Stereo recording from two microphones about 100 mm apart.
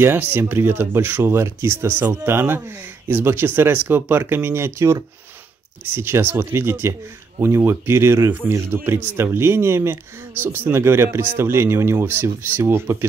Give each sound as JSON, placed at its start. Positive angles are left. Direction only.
{"t": 0.0, "sound": "speech", "side_deg": -20}